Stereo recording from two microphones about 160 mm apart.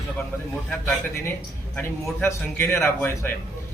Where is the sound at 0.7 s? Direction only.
15° left (ahead or behind).